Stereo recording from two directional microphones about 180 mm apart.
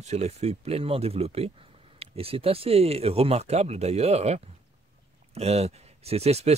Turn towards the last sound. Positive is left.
turn(degrees=-35)  # may be behind; listen again after turning